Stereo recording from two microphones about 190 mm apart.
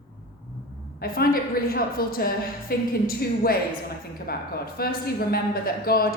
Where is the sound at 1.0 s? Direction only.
50° left (ahead or behind).